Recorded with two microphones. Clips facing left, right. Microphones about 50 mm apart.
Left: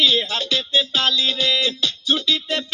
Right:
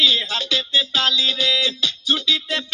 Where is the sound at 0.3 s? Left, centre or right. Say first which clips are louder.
Even; left.